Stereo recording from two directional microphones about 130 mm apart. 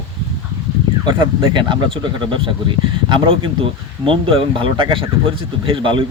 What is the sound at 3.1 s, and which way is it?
Speech, 40° right (ahead or behind).